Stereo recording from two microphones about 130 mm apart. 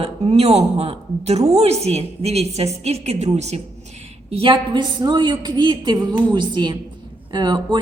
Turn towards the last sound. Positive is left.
turn(degrees=-35)  # may be behind; listen again after turning